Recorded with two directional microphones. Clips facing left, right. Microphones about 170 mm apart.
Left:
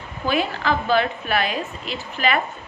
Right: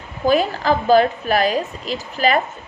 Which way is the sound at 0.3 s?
40° right (ahead or behind).